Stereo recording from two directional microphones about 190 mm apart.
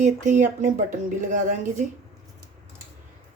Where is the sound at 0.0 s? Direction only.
40° right (ahead or behind).